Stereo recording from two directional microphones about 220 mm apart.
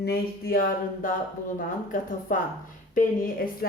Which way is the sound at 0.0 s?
45° left (ahead or behind).